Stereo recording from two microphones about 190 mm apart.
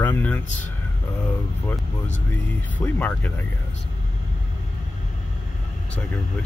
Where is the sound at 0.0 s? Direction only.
10° left (ahead or behind).